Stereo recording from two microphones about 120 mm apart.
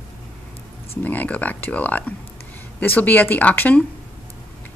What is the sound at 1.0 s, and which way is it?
A woman's voice, 15° left (ahead or behind).